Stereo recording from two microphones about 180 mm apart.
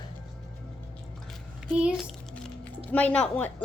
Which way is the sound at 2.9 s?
5° left (ahead or behind).